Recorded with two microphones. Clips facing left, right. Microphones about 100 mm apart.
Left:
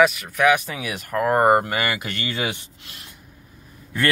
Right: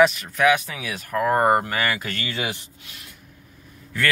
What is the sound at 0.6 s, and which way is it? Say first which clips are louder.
Speech: left 2 dB; 20° left (ahead or behind).